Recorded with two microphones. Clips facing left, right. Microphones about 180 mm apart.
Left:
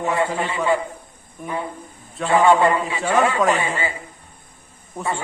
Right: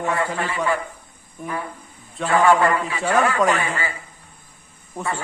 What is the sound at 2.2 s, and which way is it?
Speech, 25° left (ahead or behind).